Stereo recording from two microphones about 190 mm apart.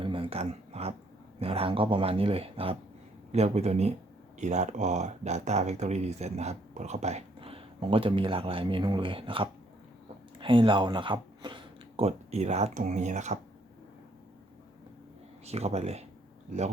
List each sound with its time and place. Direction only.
0.0 s a sound: 25° right (ahead or behind)
1.4 s speech: 30° right (ahead or behind)
15.4 s speech: 35° right (ahead or behind)